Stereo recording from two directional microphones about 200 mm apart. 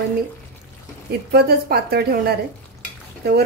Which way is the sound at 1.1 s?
50° right (ahead or behind).